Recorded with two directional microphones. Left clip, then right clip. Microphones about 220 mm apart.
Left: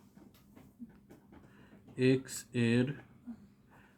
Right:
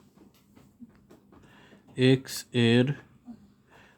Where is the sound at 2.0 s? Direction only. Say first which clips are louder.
Right 6 dB; 45° right (ahead or behind).